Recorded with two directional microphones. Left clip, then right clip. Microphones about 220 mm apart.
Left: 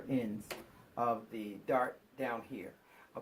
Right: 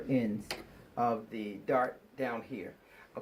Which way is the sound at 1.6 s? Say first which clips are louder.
Right 3 dB; 5° left (ahead or behind).